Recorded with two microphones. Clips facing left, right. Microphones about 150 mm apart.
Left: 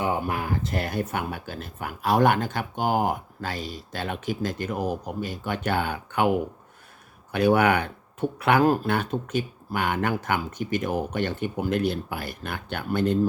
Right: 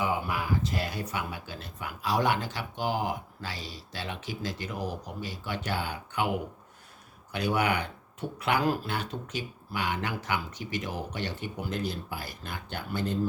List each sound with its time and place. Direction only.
0.0 s speech: 55° left (ahead or behind)